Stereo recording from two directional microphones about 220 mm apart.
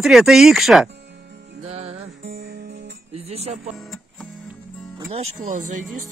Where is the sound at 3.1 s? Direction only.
30° right (ahead or behind).